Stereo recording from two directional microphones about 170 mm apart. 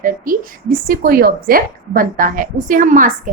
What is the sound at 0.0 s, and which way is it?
A woman's voice, 55° right (ahead or behind).